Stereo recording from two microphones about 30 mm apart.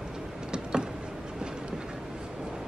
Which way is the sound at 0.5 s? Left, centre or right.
Right.